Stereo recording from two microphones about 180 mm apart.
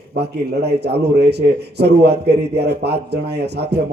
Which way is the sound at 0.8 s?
65° right (ahead or behind).